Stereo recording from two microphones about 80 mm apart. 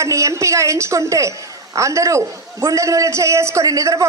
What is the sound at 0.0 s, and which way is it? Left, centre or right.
A woman's voice, right.